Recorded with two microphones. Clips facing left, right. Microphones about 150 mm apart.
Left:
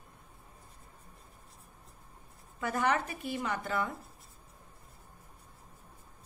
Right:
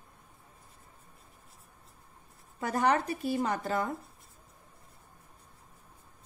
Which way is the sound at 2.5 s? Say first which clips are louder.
Right 3 dB; 35° right (ahead or behind).